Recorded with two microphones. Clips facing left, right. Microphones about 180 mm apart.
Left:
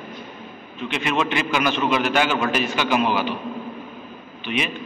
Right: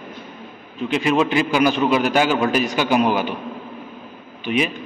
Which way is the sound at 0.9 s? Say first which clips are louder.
Right 5 dB; 35° right (ahead or behind).